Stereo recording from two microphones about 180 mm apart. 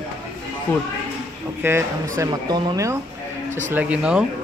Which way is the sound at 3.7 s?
5° right (ahead or behind).